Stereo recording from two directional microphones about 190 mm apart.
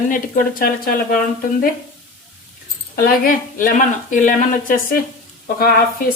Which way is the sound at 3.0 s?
45° left (ahead or behind).